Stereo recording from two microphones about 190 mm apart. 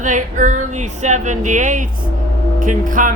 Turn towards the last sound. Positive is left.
turn(degrees=-45)  # may be behind; listen again after turning